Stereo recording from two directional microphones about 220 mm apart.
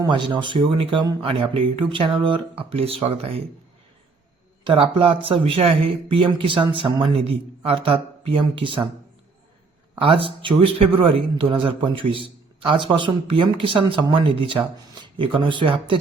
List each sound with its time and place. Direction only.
0.0 s a man's voice: 20° right (ahead or behind)
4.6 s a man's voice: 25° right (ahead or behind)
9.9 s a man's voice: 25° right (ahead or behind)